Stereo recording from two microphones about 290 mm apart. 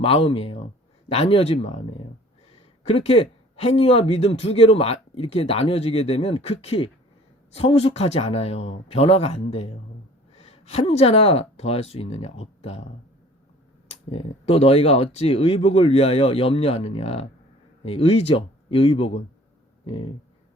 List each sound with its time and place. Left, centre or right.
0.0 s speech: centre
13.8 s speech: left